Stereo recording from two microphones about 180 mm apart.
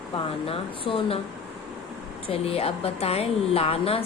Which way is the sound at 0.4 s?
30° left (ahead or behind).